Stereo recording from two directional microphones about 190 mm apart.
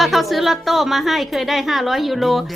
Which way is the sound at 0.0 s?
Centre (ahead or behind).